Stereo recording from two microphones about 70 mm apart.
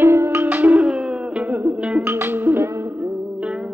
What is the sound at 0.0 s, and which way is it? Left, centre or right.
Music, right.